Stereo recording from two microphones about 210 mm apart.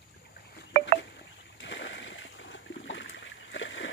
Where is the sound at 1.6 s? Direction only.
60° left (ahead or behind).